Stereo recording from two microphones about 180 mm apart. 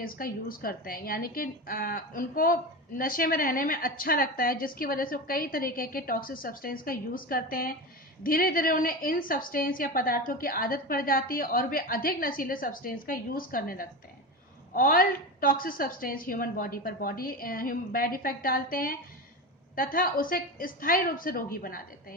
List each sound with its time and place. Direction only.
0.0 s a woman's voice: 50° left (ahead or behind)